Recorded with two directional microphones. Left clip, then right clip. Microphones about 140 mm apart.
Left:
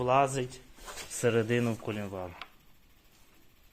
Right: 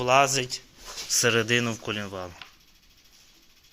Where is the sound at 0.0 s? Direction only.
5° left (ahead or behind).